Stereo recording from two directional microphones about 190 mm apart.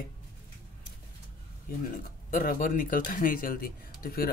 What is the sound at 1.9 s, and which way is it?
Speech, 45° left (ahead or behind).